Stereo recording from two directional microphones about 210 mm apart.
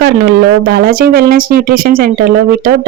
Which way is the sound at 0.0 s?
50° right (ahead or behind).